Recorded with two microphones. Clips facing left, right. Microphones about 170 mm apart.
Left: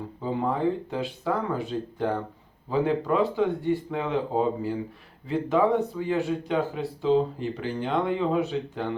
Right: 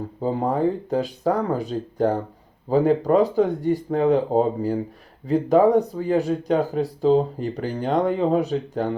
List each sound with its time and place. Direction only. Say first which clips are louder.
0.2 s speech: right 5 dB; 40° right (ahead or behind)